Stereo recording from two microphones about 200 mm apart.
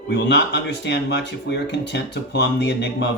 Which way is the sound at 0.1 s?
60° left (ahead or behind).